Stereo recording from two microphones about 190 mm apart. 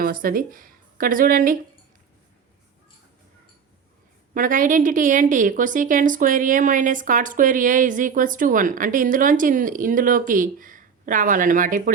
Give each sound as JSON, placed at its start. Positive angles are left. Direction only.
{"t": 0.0, "sound": "speech", "side_deg": -50}
{"t": 4.4, "sound": "a woman's voice", "side_deg": -45}